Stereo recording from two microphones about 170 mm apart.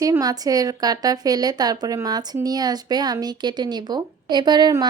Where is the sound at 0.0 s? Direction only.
20° right (ahead or behind).